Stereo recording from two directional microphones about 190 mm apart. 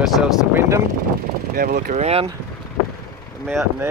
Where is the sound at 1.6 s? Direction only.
50° right (ahead or behind).